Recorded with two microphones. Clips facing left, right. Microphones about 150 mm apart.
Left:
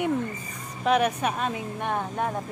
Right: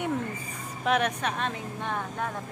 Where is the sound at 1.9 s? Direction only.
25° left (ahead or behind).